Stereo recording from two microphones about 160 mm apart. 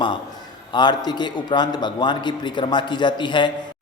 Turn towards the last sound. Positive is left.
turn(degrees=30)  # may be behind; listen again after turning